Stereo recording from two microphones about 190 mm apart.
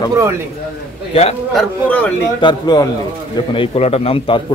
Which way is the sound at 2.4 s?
20° left (ahead or behind).